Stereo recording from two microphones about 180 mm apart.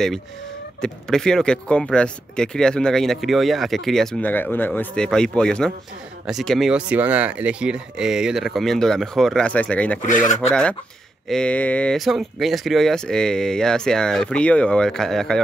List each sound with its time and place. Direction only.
0.7 s speech: 5° left (ahead or behind)
10.0 s speech: 40° left (ahead or behind)
10.5 s speech: 5° left (ahead or behind)